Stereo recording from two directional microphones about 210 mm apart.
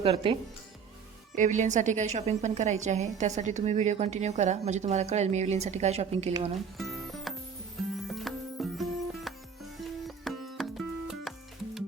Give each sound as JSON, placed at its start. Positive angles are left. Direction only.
{"t": 0.0, "sound": "speech", "side_deg": -25}
{"t": 1.4, "sound": "a woman's voice", "side_deg": -35}
{"t": 6.7, "sound": "music", "side_deg": 0}